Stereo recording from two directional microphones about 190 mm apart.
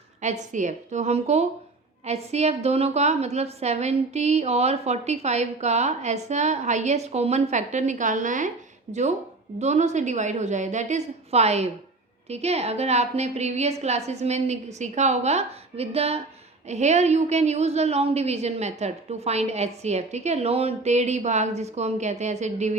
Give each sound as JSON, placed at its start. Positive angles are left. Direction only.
{"t": 0.2, "sound": "a woman's voice", "side_deg": -40}